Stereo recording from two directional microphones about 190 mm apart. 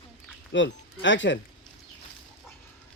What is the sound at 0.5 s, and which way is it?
Speech, 75° left (ahead or behind).